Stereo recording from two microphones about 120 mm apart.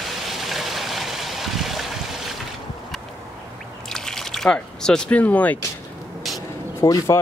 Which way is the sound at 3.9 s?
5° left (ahead or behind).